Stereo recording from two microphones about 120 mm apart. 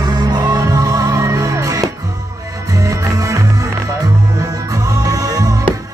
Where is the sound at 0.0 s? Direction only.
35° right (ahead or behind).